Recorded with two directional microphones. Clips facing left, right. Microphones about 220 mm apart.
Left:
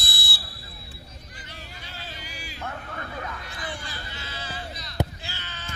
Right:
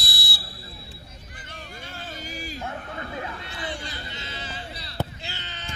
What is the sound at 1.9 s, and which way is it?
Hubbub, 45° right (ahead or behind).